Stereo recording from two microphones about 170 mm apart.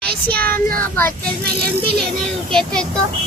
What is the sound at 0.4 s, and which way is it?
Speech, 60° right (ahead or behind).